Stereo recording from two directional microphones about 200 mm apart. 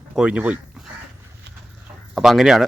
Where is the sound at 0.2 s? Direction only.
5° right (ahead or behind).